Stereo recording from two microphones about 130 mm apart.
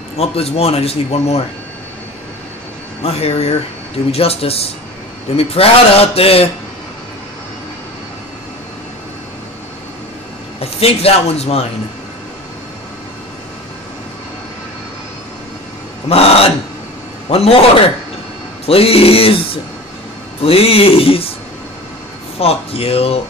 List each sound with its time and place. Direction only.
0.2 s speech: 50° left (ahead or behind)
3.0 s speech: 50° left (ahead or behind)
10.6 s speech: 50° left (ahead or behind)
16.1 s speech: 50° left (ahead or behind)
18.7 s speech: 50° left (ahead or behind)
22.4 s speech: 50° left (ahead or behind)